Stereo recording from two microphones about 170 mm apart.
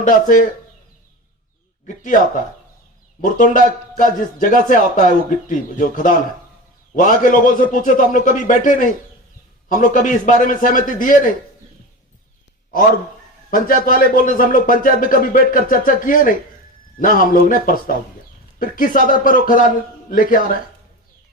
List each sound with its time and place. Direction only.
0.0 s a man's voice: 50° left (ahead or behind)
3.2 s a man's voice: 50° left (ahead or behind)
13.5 s a man's voice: 55° left (ahead or behind)